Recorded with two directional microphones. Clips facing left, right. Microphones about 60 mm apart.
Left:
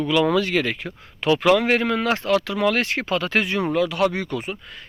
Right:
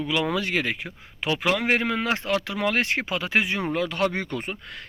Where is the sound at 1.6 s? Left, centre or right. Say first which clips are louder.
Left 3 dB; right.